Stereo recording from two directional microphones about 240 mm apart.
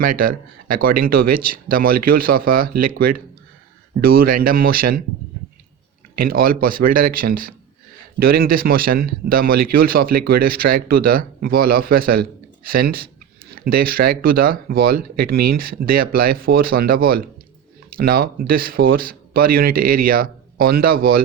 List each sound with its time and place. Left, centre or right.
0.0 s speech: right
6.2 s speech: right